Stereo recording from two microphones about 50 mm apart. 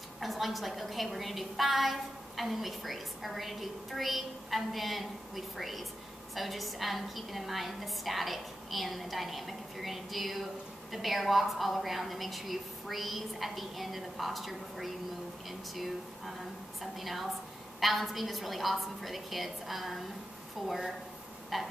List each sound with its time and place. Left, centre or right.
0.2 s a woman's voice: centre